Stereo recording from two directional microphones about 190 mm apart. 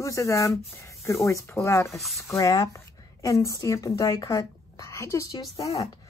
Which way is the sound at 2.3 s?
15° left (ahead or behind).